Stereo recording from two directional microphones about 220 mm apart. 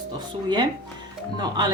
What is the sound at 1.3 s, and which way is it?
Speech, 20° right (ahead or behind).